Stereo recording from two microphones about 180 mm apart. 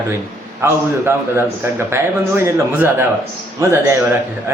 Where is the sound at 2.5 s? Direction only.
10° right (ahead or behind).